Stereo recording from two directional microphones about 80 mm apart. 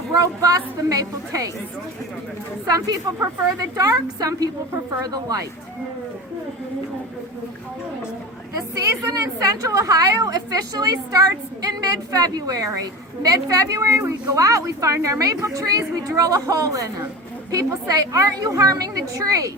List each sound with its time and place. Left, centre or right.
0.1 s a woman's voice: right
2.6 s a woman's voice: right
9.0 s a woman's voice: right